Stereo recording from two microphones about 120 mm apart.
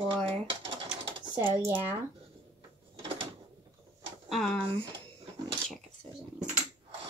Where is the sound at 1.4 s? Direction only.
15° right (ahead or behind).